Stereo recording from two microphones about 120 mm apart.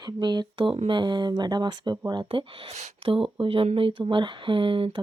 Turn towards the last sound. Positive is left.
turn(degrees=-45)  # may be behind; listen again after turning